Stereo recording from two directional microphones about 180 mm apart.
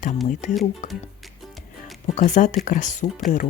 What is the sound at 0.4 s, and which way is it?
Speech, 45° left (ahead or behind).